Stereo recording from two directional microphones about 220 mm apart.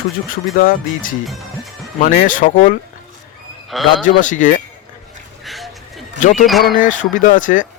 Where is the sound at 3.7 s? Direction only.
Centre (ahead or behind).